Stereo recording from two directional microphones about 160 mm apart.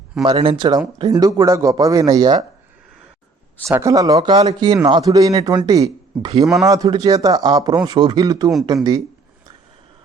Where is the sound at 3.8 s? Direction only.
20° right (ahead or behind).